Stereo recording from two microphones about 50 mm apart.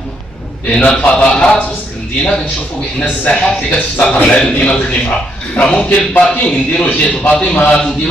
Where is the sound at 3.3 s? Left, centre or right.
Left.